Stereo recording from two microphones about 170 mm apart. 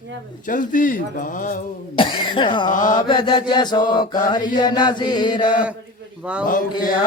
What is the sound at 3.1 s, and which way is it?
Chant, 30° left (ahead or behind).